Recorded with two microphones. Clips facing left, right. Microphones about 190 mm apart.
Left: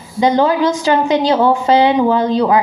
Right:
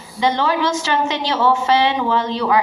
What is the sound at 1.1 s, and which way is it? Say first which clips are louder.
A woman's voice: left 5 dB; 45° left (ahead or behind).